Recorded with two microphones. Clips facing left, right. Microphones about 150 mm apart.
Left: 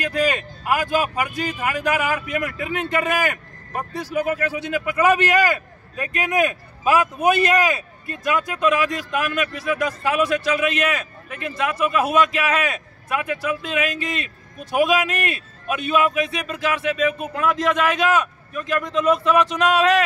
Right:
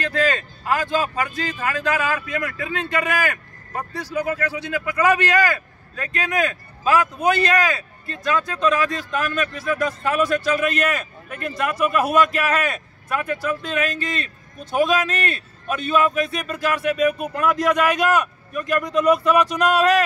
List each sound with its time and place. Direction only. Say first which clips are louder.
0.0 s speech: even; 15° left (ahead or behind); by 20.0 s 5° right (ahead or behind)